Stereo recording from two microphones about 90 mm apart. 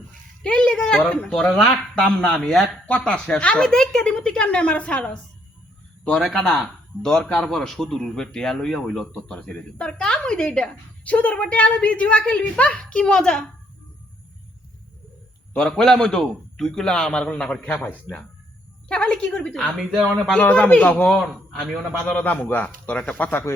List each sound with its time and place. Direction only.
0.4 s speech: 10° left (ahead or behind)
15.5 s a man's voice: 10° left (ahead or behind)
22.1 s speech: 15° left (ahead or behind)